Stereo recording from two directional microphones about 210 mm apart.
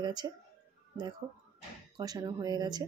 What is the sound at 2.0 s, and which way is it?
Speech, 20° right (ahead or behind).